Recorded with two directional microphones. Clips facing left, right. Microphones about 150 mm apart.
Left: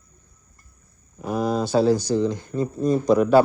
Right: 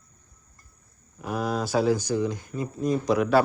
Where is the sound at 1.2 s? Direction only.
5° right (ahead or behind).